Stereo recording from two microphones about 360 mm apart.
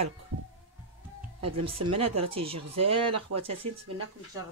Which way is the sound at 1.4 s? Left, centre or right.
Right.